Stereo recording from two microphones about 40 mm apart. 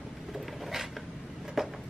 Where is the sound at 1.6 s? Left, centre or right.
Centre.